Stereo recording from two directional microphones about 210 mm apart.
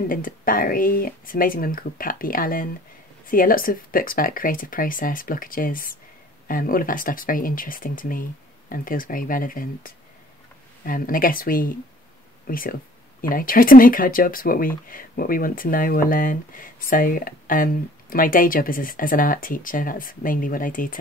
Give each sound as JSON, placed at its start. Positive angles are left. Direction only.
{"t": 0.1, "sound": "speech", "side_deg": 40}